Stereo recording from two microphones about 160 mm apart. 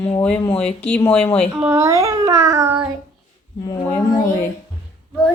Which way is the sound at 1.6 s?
15° right (ahead or behind).